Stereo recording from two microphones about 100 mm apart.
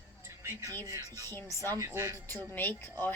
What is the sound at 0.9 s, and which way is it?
Speech, 35° right (ahead or behind).